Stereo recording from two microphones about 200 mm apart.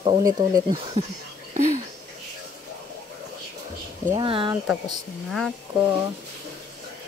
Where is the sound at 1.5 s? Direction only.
40° right (ahead or behind).